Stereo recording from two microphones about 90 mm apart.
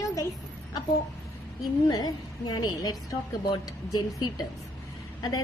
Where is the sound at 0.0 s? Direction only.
40° left (ahead or behind).